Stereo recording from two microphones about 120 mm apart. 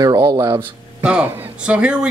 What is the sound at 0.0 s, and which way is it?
Speech, 35° right (ahead or behind).